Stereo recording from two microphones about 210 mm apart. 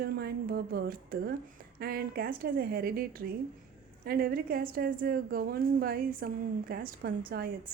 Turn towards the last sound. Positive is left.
turn(degrees=-45)  # may be behind; listen again after turning